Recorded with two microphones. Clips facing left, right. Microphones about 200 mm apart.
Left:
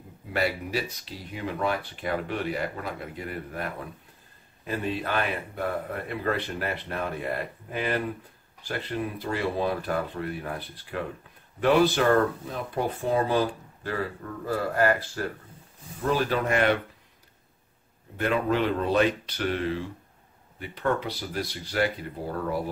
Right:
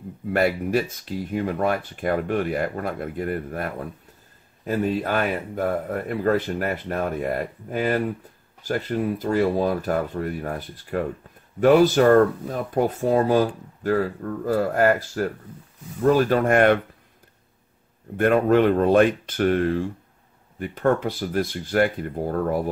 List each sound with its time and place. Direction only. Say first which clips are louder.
0.3 s speech: right 7 dB; 50° right (ahead or behind)
16.0 s speech: right 7 dB; 45° right (ahead or behind)
18.1 s speech: right 8 dB; 50° right (ahead or behind)